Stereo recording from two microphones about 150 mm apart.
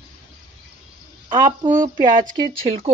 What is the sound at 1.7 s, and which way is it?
A woman's voice, 30° right (ahead or behind).